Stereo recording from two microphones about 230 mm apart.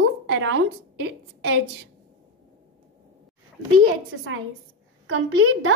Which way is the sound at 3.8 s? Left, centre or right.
Right.